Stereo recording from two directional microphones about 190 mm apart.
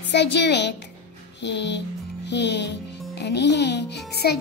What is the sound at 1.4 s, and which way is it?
Music, 65° left (ahead or behind).